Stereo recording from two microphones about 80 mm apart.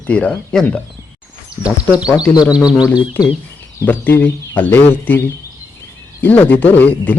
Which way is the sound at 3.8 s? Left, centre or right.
Left.